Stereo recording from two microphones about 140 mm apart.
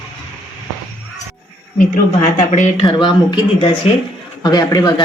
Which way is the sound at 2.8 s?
35° left (ahead or behind).